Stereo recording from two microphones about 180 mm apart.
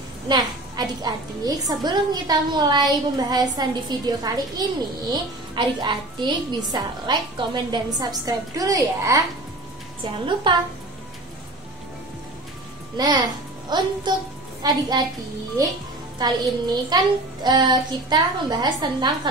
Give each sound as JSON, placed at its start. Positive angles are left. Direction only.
{"t": 0.3, "sound": "a woman's voice", "side_deg": -25}
{"t": 12.9, "sound": "a child's voice", "side_deg": -25}
{"t": 16.2, "sound": "a woman's voice", "side_deg": -25}